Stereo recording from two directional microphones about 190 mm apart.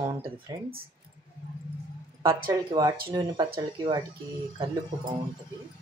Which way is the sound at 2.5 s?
20° right (ahead or behind).